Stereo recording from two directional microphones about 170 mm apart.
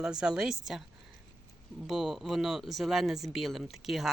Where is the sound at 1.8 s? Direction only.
Centre (ahead or behind).